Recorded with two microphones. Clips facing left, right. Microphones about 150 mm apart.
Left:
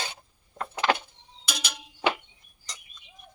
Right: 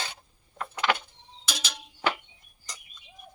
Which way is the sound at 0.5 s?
35° left (ahead or behind).